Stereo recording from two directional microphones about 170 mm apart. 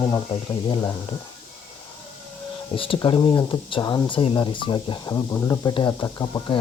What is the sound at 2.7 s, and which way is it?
Speech, 30° left (ahead or behind).